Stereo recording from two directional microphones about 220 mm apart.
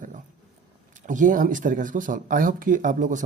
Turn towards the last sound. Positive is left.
turn(degrees=-35)  # may be behind; listen again after turning